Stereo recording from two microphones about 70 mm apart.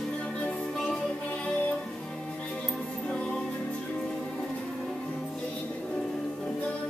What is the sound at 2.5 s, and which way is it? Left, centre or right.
Music, centre.